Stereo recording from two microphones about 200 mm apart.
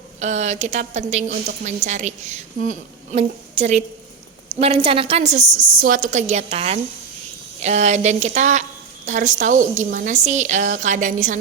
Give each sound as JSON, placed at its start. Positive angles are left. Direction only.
{"t": 0.2, "sound": "a woman's voice", "side_deg": -35}